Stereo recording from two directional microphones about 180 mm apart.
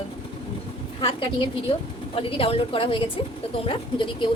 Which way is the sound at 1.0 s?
30° left (ahead or behind).